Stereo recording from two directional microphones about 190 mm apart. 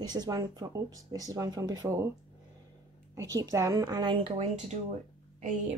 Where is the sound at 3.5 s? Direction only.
15° right (ahead or behind).